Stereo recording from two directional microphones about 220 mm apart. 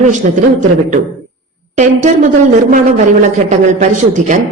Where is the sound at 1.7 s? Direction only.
35° right (ahead or behind).